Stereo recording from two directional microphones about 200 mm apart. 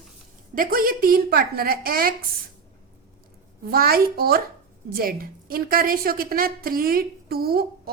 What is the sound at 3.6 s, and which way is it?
A woman's voice, 50° right (ahead or behind).